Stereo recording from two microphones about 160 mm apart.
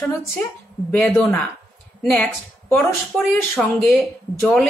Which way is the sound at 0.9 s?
5° left (ahead or behind).